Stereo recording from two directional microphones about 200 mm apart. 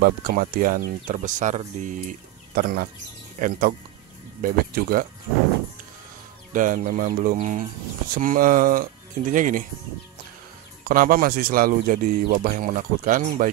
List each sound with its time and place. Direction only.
0.0 s speech: 45° right (ahead or behind)
2.5 s speech: 50° right (ahead or behind)
6.5 s speech: 40° right (ahead or behind)
10.9 s speech: 45° right (ahead or behind)